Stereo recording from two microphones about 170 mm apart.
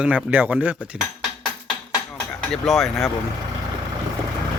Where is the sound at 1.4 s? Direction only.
25° left (ahead or behind).